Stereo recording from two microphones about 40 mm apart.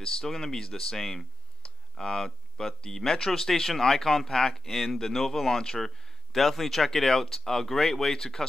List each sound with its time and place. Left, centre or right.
0.0 s speech: centre